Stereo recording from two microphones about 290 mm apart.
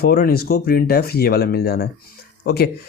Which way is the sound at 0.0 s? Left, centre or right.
Left.